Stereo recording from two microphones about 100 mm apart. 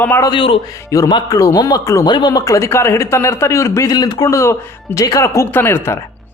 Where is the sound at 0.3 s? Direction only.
55° left (ahead or behind).